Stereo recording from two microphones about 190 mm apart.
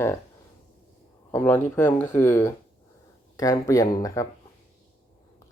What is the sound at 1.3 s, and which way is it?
Speech, 10° left (ahead or behind).